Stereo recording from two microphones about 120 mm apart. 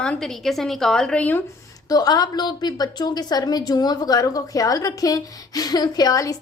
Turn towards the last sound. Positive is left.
turn(degrees=30)  # may be behind; listen again after turning